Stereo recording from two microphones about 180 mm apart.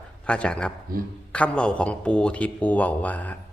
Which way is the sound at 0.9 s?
55° right (ahead or behind).